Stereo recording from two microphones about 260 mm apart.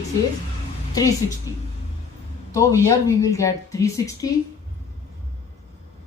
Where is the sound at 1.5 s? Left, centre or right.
Centre.